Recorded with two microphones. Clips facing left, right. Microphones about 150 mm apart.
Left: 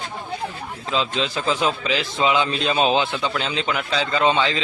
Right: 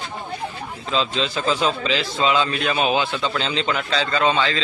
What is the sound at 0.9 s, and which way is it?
A man's voice, 10° left (ahead or behind).